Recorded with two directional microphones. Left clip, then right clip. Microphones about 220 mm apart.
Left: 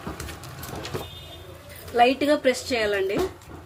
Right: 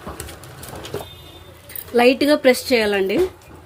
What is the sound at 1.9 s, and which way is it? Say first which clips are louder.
A woman's voice: right 5 dB; 40° right (ahead or behind).